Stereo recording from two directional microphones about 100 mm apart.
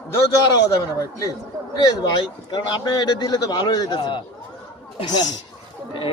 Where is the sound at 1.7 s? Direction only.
45° left (ahead or behind).